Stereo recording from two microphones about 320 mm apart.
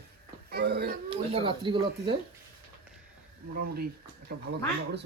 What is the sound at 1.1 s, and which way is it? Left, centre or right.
Speech, centre.